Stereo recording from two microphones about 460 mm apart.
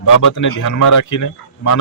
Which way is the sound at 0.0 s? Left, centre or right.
Left.